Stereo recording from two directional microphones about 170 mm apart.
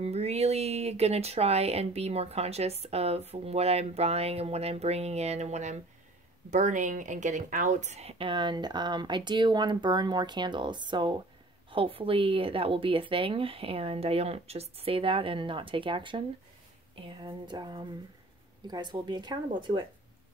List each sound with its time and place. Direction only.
0.0 s speech: 40° right (ahead or behind)